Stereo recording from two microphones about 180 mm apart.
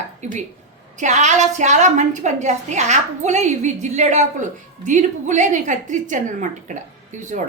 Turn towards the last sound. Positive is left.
turn(degrees=-45)  # may be behind; listen again after turning